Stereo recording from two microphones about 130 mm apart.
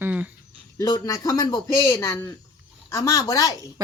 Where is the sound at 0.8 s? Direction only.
30° left (ahead or behind).